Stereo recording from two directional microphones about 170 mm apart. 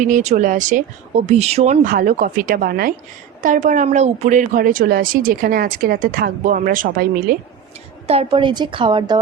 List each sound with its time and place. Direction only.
0.0 s speech: 45° right (ahead or behind)
1.9 s speech: 55° right (ahead or behind)
3.4 s speech: 50° right (ahead or behind)
8.0 s a woman's voice: 35° right (ahead or behind)